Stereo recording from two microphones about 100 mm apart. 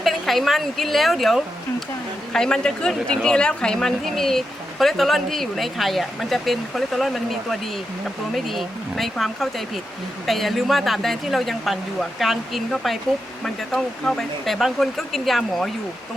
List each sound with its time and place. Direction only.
0.0 s a woman's voice: centre (ahead or behind)